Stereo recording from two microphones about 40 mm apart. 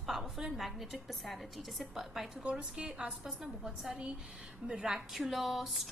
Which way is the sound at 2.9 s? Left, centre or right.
Centre.